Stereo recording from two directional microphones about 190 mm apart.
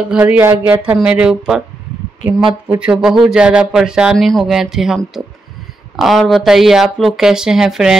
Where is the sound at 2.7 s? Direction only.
5° right (ahead or behind).